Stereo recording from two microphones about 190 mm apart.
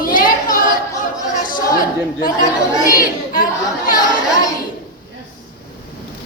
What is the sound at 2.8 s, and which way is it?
Speech, 45° left (ahead or behind).